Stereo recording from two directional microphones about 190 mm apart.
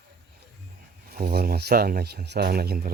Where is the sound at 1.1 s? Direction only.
55° right (ahead or behind).